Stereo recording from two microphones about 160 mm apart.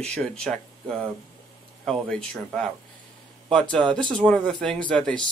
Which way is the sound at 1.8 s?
5° left (ahead or behind).